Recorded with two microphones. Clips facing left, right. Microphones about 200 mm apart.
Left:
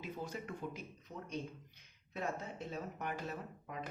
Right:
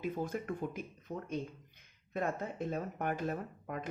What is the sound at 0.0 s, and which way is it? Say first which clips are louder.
Speech: right 7 dB; 50° right (ahead or behind).